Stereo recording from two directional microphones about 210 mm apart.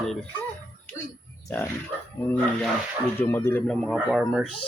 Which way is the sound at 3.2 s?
10° left (ahead or behind).